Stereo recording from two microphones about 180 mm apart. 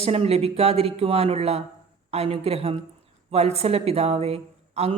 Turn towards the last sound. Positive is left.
turn(degrees=-35)  # may be behind; listen again after turning